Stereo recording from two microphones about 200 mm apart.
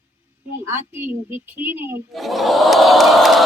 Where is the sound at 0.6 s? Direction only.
10° right (ahead or behind).